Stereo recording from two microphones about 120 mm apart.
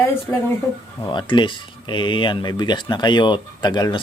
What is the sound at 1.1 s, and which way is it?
Speech, 40° left (ahead or behind).